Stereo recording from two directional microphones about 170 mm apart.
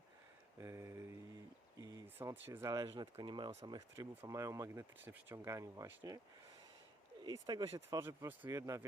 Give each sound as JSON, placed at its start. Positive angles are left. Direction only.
{"t": 0.6, "sound": "speech", "side_deg": -15}
{"t": 7.3, "sound": "speech", "side_deg": -25}